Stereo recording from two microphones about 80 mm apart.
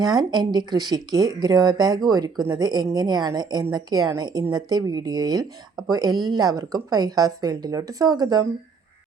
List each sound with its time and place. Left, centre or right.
0.0 s speech: right